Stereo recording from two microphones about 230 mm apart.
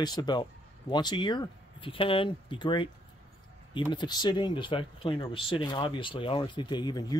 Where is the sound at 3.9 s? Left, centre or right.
Centre.